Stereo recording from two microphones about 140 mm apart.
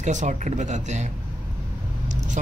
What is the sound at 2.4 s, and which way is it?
Speech, 60° right (ahead or behind).